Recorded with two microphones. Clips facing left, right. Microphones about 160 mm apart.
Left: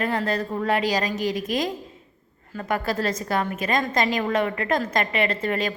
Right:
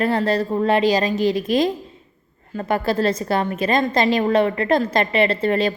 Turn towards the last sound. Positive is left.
turn(degrees=-30)  # may be behind; listen again after turning